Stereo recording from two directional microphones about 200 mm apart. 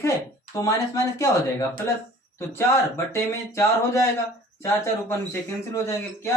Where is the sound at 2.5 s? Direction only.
10° left (ahead or behind).